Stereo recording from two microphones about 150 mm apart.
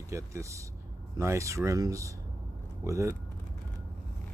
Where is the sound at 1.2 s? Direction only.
20° right (ahead or behind).